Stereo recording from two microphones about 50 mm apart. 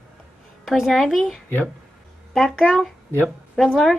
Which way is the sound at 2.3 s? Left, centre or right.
Centre.